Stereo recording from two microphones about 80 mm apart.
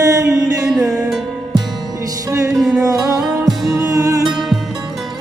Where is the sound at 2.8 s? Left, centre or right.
Right.